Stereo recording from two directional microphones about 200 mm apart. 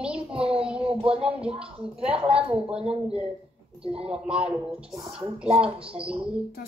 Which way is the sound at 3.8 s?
30° right (ahead or behind).